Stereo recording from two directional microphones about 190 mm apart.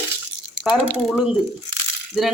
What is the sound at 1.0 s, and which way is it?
Speech, 5° right (ahead or behind).